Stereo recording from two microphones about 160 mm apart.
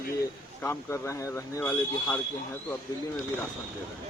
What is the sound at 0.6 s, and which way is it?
Speech, 15° left (ahead or behind).